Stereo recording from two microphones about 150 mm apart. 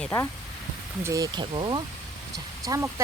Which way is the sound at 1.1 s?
20° right (ahead or behind).